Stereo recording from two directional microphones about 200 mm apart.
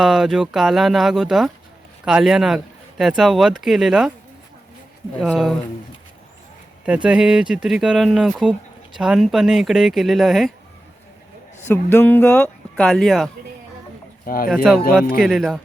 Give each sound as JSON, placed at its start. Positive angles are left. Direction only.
{"t": 0.0, "sound": "speech", "side_deg": 0}
{"t": 5.2, "sound": "speech", "side_deg": 0}
{"t": 6.8, "sound": "speech", "side_deg": -5}
{"t": 11.6, "sound": "speech", "side_deg": 10}
{"t": 14.3, "sound": "speech", "side_deg": 45}
{"t": 14.5, "sound": "speech", "side_deg": -5}